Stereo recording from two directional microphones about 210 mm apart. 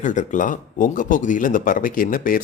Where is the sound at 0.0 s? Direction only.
35° left (ahead or behind).